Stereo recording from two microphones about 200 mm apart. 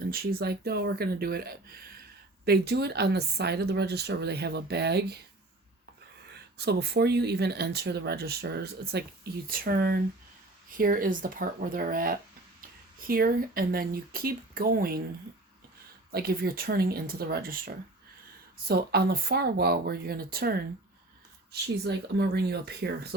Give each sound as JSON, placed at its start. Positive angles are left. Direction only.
{"t": 0.0, "sound": "a woman's voice", "side_deg": -50}
{"t": 6.6, "sound": "a woman's voice", "side_deg": -55}
{"t": 16.1, "sound": "speech", "side_deg": -50}